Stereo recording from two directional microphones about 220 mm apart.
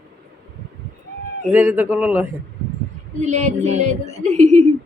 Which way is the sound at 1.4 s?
5° right (ahead or behind).